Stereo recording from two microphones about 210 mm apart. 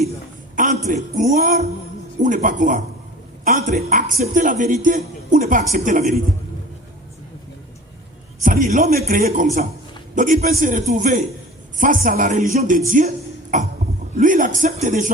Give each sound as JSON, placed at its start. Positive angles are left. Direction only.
{"t": 0.5, "sound": "a sound", "side_deg": -35}
{"t": 0.9, "sound": "a woman's voice", "side_deg": -35}
{"t": 8.4, "sound": "a woman's voice", "side_deg": -40}